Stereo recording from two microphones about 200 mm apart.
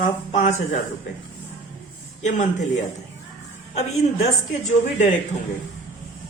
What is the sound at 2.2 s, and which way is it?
Speech, 35° left (ahead or behind).